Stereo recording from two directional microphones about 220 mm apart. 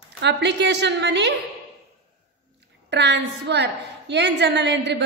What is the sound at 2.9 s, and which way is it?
A woman's voice, 50° right (ahead or behind).